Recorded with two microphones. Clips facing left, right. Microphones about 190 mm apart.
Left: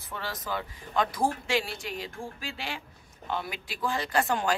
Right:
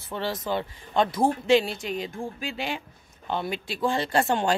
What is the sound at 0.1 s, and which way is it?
Speech, 25° right (ahead or behind).